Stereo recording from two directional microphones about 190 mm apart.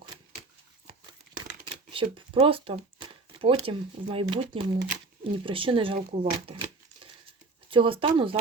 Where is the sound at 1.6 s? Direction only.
25° right (ahead or behind).